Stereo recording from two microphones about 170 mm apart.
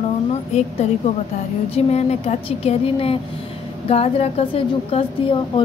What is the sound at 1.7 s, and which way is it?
A woman's voice, 40° left (ahead or behind).